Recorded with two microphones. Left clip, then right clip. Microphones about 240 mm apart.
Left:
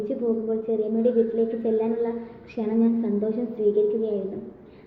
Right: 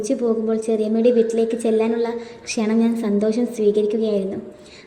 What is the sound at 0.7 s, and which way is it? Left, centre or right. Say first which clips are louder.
A woman's voice: right 6 dB; right.